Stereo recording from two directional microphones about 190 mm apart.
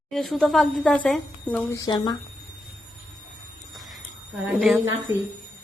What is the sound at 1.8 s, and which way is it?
Speech, 20° left (ahead or behind).